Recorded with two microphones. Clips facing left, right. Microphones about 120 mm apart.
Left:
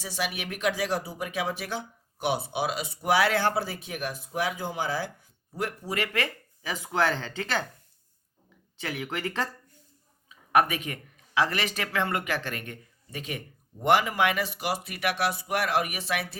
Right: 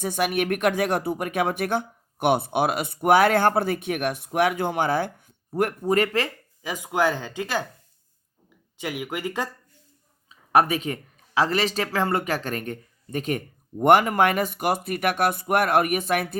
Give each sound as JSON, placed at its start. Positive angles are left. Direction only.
{"t": 0.0, "sound": "speech", "side_deg": -55}
{"t": 6.2, "sound": "speech", "side_deg": -20}
{"t": 8.8, "sound": "speech", "side_deg": -15}
{"t": 10.2, "sound": "speech", "side_deg": -35}